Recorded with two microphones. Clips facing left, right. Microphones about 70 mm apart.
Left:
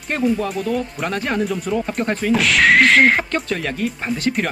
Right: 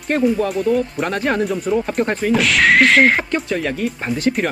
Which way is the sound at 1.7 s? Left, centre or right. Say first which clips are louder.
Right 4 dB; right.